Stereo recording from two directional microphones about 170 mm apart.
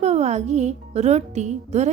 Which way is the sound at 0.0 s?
40° right (ahead or behind).